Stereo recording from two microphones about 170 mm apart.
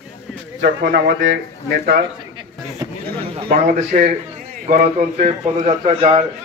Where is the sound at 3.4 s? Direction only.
50° right (ahead or behind).